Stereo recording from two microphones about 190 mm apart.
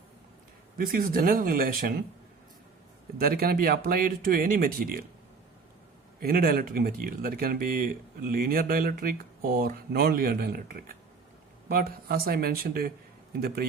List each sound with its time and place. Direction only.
0.8 s speech: 50° right (ahead or behind)
3.2 s speech: 50° right (ahead or behind)
6.1 s speech: 50° right (ahead or behind)